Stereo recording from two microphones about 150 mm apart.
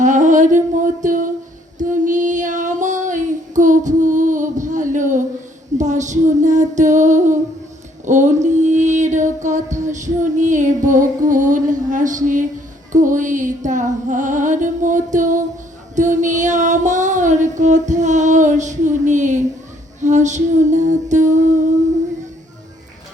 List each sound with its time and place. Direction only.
0.0 s humming: 55° right (ahead or behind)
1.8 s child singing: 55° right (ahead or behind)
5.7 s a sound: 55° right (ahead or behind)
8.0 s music: 55° right (ahead or behind)
12.9 s female singing: 55° right (ahead or behind)
20.0 s a sound: 55° right (ahead or behind)